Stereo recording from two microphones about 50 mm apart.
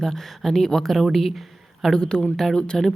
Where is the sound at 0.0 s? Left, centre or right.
Centre.